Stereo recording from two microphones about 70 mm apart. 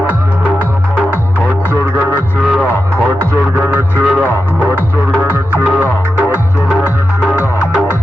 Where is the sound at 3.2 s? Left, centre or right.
Right.